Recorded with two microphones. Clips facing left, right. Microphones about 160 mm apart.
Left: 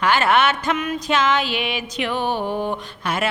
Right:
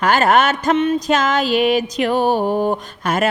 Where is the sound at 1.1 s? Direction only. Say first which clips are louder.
Right 4 dB; 40° right (ahead or behind).